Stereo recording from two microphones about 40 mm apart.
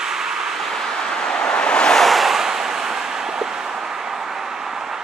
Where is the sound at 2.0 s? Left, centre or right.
Centre.